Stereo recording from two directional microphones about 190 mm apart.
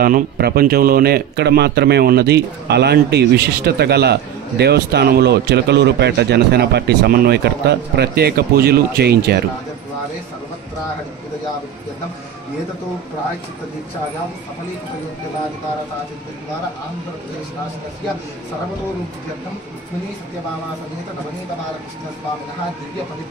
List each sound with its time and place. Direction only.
0.0 s speech: 55° right (ahead or behind)